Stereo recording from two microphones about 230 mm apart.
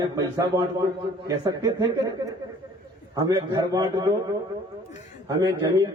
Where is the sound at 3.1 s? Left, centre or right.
Centre.